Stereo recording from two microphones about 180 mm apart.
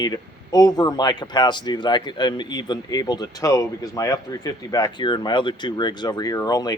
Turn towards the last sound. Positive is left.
turn(degrees=20)  # may be behind; listen again after turning